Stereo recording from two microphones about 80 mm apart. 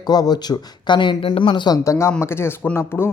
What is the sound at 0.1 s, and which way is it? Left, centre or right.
Speech, left.